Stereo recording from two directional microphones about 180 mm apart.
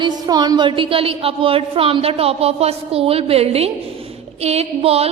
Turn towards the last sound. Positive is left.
turn(degrees=-35)  # may be behind; listen again after turning